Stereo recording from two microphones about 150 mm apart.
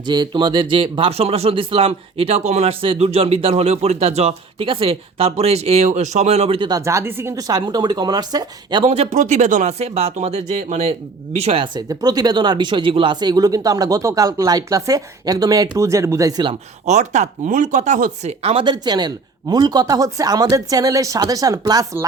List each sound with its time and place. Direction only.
0.0 s speech: 30° right (ahead or behind)
6.7 s speech: 20° right (ahead or behind)
8.9 s speech: 50° right (ahead or behind); by 16.5 s 20° right (ahead or behind)
16.8 s speech: 50° right (ahead or behind)
18.6 s speech: 30° right (ahead or behind)